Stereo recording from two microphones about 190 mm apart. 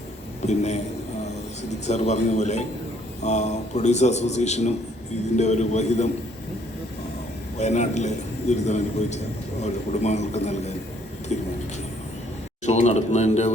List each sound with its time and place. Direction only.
0.4 s a man's voice: 35° left (ahead or behind)
1.9 s a man's voice: 35° left (ahead or behind)
7.6 s a man's voice: 35° left (ahead or behind)
12.6 s a man's voice: 35° left (ahead or behind)